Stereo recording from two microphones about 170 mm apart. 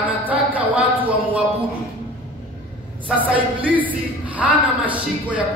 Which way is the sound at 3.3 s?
10° right (ahead or behind).